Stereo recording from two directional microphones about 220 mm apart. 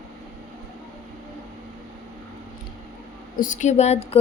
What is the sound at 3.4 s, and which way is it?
Speech, 35° left (ahead or behind).